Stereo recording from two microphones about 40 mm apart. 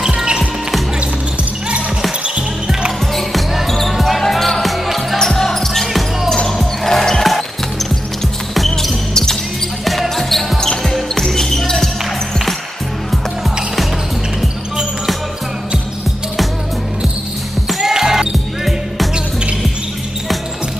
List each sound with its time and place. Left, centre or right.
0.0 s music: centre
3.2 s basketball bounce: centre
4.2 s music: centre
4.8 s basketball bounce: centre
5.2 s basketball bounce: centre
6.6 s music: centre
8.5 s basketball bounce: centre
9.1 s basketball bounce: centre
9.8 s a sound: centre
10.8 s basketball bounce: centre
17.6 s music: centre